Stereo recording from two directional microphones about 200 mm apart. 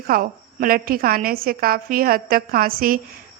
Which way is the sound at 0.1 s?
45° right (ahead or behind).